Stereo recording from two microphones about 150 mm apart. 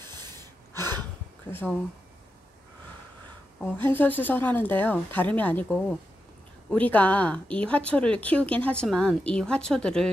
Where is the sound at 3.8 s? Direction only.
10° left (ahead or behind).